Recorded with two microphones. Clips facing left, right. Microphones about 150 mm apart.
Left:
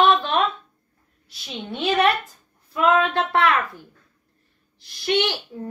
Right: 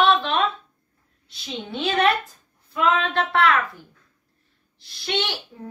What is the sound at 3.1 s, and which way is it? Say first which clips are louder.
Speech: even; 15° left (ahead or behind).